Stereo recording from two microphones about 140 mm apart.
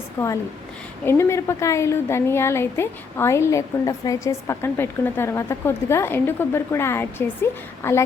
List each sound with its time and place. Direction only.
0.2 s a woman's voice: 20° left (ahead or behind)